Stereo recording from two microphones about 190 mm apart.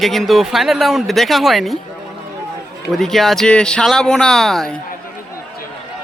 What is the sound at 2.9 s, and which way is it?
Speech, centre (ahead or behind).